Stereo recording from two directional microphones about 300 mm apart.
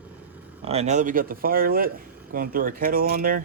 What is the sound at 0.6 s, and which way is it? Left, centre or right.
Speech, right.